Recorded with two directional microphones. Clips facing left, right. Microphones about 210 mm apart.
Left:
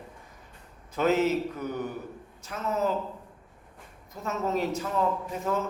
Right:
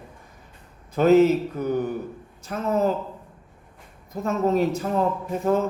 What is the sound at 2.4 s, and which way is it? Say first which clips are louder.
Speech: right 6 dB; 50° right (ahead or behind).